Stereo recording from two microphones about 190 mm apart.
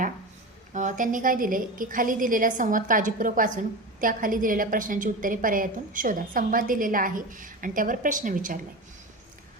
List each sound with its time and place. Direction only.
0.7 s a woman's voice: 40° right (ahead or behind)